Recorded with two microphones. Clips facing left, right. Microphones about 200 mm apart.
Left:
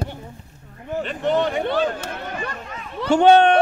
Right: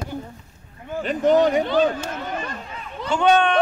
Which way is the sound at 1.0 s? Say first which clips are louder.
Right 4 dB; 40° right (ahead or behind).